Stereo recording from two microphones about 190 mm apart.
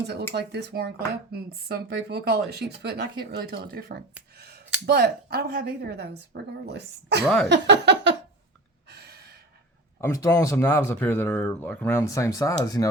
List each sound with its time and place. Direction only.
0.3 s speech: 60° right (ahead or behind)
8.9 s gasp: 60° right (ahead or behind)
10.0 s speech: 15° left (ahead or behind)